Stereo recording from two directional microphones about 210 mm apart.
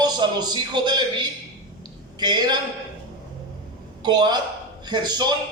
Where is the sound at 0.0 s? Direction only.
20° right (ahead or behind).